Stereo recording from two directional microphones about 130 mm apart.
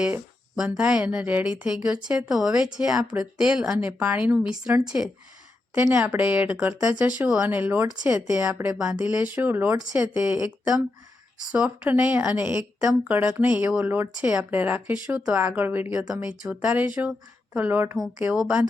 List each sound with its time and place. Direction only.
0.0 s a sound: 5° right (ahead or behind)
0.8 s a woman's voice: 5° right (ahead or behind)
6.1 s a woman's voice: 10° right (ahead or behind)